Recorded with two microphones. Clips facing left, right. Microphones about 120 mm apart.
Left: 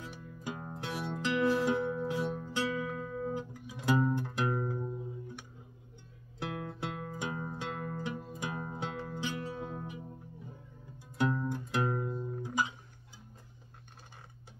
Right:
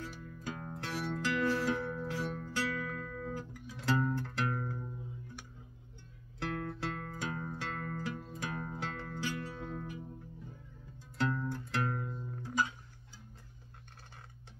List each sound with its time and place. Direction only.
0.0 s music: 20° left (ahead or behind)
6.4 s music: 15° left (ahead or behind)
11.1 s music: 15° left (ahead or behind)